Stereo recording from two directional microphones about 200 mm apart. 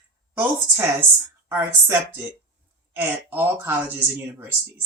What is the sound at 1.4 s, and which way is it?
Speech, 10° right (ahead or behind).